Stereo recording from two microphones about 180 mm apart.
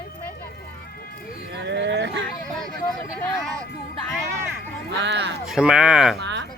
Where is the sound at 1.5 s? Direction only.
75° right (ahead or behind).